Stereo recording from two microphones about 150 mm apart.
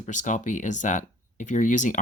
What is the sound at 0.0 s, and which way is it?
Speech, 55° left (ahead or behind).